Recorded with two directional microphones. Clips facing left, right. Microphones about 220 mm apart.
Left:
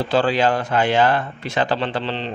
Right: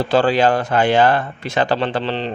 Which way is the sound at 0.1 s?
45° right (ahead or behind).